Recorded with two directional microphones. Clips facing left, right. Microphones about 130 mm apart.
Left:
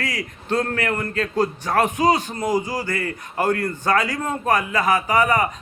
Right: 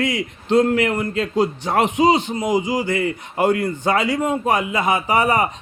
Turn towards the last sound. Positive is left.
turn(degrees=-30)  # may be behind; listen again after turning